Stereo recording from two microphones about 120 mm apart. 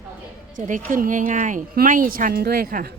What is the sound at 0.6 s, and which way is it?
A woman's voice, 90° right.